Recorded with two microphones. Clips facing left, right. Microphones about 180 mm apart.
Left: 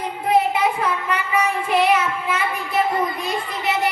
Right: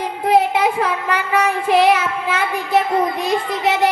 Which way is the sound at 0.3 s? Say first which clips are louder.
Right 3 dB; 90° right.